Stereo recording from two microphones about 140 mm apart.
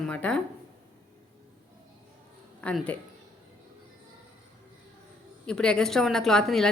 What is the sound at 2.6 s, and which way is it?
Speech, 10° left (ahead or behind).